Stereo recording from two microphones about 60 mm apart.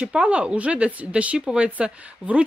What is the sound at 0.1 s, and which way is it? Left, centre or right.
Speech, centre.